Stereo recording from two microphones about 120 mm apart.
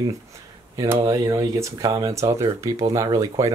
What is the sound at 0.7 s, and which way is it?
Speech, 25° right (ahead or behind).